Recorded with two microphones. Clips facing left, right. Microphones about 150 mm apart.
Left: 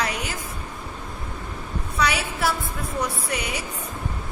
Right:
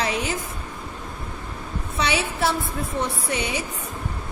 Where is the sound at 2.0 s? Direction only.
25° right (ahead or behind).